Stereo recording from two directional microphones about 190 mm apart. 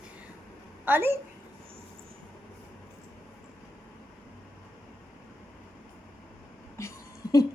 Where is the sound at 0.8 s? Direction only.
10° right (ahead or behind).